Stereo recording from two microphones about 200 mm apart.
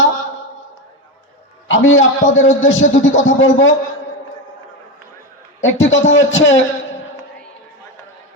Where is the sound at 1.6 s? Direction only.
75° left (ahead or behind).